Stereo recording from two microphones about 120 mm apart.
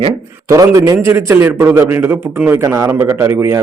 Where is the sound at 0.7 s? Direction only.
25° right (ahead or behind).